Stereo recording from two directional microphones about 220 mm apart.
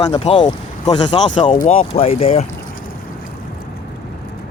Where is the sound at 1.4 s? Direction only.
30° left (ahead or behind).